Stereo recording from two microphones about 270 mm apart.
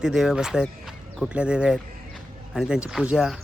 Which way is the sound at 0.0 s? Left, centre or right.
Centre.